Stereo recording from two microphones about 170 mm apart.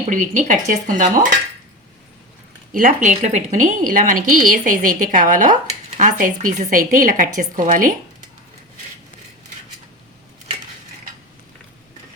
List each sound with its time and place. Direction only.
0.1 s a woman's voice: 45° right (ahead or behind)
2.7 s a woman's voice: 50° right (ahead or behind)